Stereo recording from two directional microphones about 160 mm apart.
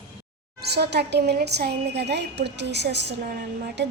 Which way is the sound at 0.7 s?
90° right.